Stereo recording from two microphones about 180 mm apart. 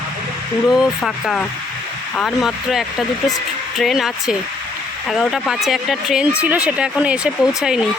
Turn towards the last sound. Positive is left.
turn(degrees=-5)  # may be behind; listen again after turning